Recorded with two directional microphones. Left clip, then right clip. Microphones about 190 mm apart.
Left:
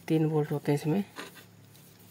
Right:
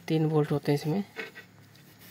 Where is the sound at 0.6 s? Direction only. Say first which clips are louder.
Even; centre (ahead or behind).